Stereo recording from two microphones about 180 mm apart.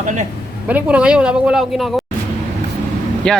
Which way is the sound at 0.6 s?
10° right (ahead or behind).